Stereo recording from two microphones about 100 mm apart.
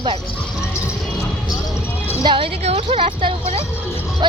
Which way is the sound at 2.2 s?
55° right (ahead or behind).